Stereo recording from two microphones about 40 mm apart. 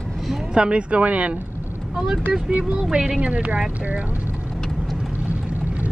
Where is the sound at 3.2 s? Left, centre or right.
Right.